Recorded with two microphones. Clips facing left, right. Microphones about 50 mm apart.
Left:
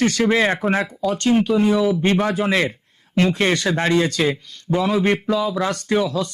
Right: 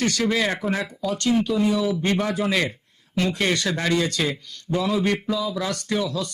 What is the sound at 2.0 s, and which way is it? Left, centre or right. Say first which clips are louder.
A man's voice: left 4 dB; left.